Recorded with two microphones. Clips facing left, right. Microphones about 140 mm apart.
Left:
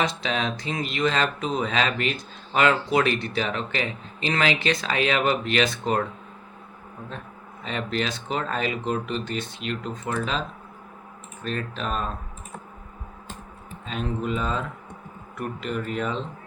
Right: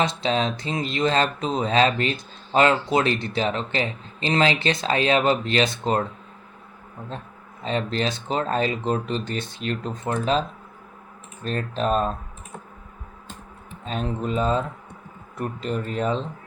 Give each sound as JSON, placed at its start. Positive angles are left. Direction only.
{"t": 0.0, "sound": "speech", "side_deg": -30}
{"t": 7.6, "sound": "speech", "side_deg": -35}
{"t": 11.4, "sound": "speech", "side_deg": -35}
{"t": 13.8, "sound": "speech", "side_deg": -35}